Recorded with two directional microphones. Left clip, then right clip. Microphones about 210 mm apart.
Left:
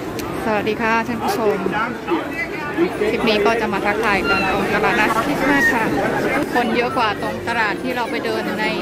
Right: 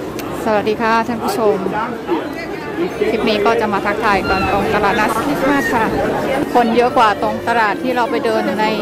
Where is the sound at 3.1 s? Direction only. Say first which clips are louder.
Right 3 dB; 5° right (ahead or behind).